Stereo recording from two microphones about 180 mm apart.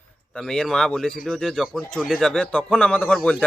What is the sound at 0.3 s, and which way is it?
Speech, 5° left (ahead or behind).